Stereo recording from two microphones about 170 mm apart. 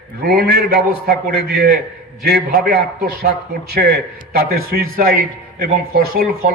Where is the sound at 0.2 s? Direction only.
65° right (ahead or behind).